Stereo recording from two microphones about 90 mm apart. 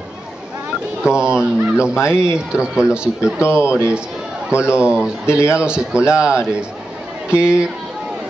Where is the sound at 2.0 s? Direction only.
30° left (ahead or behind).